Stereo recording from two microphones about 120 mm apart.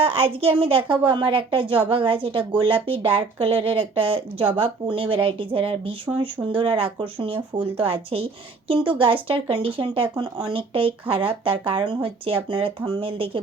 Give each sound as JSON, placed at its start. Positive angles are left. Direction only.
{"t": 0.0, "sound": "speech", "side_deg": -55}